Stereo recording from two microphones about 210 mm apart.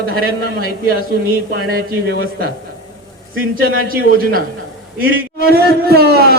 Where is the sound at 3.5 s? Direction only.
45° right (ahead or behind).